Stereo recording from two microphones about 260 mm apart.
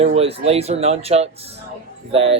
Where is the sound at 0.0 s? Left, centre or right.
Right.